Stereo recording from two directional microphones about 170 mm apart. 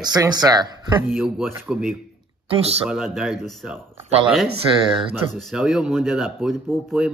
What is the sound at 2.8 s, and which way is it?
Speech, centre (ahead or behind).